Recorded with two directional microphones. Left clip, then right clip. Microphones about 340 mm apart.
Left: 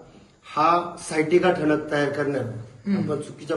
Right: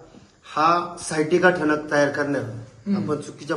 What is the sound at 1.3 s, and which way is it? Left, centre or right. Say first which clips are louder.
A man's voice: right 2 dB; centre.